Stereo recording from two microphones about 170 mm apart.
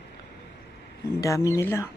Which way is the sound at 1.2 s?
20° left (ahead or behind).